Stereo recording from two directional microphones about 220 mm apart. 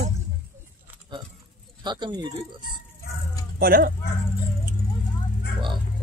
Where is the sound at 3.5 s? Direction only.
40° right (ahead or behind).